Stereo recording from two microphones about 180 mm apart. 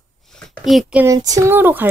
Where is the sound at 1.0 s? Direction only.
20° right (ahead or behind).